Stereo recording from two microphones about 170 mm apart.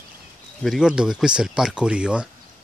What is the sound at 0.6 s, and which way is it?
Speech, centre (ahead or behind).